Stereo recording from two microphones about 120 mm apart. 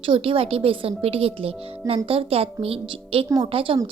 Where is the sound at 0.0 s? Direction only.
50° right (ahead or behind).